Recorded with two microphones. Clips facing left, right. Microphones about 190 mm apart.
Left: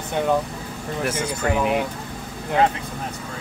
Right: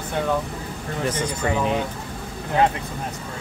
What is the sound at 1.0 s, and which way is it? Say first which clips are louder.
Speech: right 1 dB; 10° left (ahead or behind).